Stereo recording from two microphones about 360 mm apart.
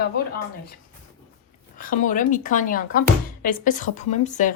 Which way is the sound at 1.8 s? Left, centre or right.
Left.